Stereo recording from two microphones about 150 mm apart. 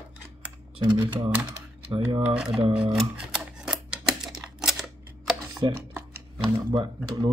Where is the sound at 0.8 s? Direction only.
30° right (ahead or behind).